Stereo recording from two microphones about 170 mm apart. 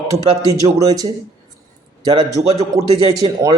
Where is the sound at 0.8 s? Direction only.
25° right (ahead or behind).